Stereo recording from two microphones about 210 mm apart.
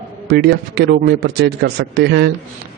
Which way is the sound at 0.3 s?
50° right (ahead or behind).